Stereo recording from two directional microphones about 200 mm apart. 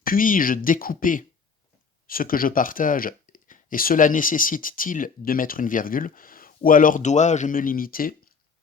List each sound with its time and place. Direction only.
0.0 s speech: 45° left (ahead or behind)